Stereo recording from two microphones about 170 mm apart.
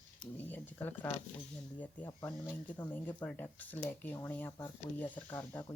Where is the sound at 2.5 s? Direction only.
10° left (ahead or behind).